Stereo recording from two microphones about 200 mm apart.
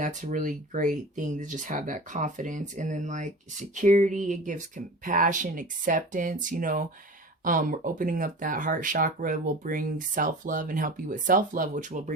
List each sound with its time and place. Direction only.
0.0 s speech: 40° right (ahead or behind)